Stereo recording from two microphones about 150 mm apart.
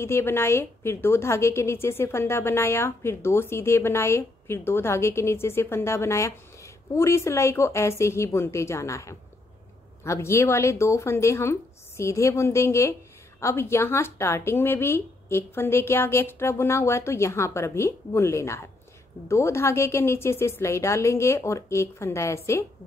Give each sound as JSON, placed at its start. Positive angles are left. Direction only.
{"t": 0.0, "sound": "a woman's voice", "side_deg": 15}